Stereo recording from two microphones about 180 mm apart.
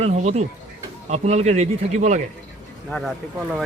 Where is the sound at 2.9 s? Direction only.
Centre (ahead or behind).